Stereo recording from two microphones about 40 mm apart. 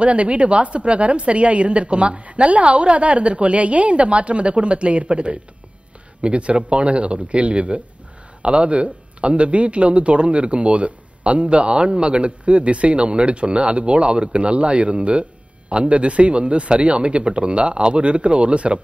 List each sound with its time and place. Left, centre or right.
0.0 s a woman's voice: right